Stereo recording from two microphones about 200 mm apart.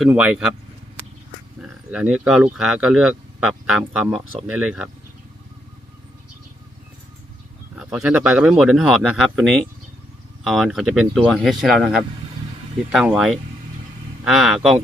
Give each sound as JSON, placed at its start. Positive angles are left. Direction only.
{"t": 0.0, "sound": "speech", "side_deg": -5}
{"t": 1.9, "sound": "speech", "side_deg": -5}
{"t": 7.8, "sound": "speech", "side_deg": -5}